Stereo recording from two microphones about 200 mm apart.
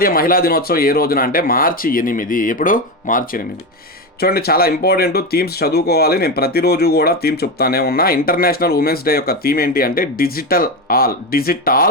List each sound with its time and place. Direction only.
0.0 s speech: 45° left (ahead or behind)